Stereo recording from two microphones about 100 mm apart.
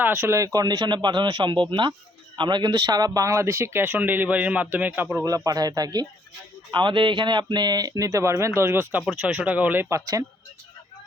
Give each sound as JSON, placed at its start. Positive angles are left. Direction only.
{"t": 0.0, "sound": "speech", "side_deg": -25}
{"t": 5.2, "sound": "speech", "side_deg": -35}
{"t": 9.0, "sound": "speech", "side_deg": -15}
{"t": 9.9, "sound": "speech", "side_deg": -35}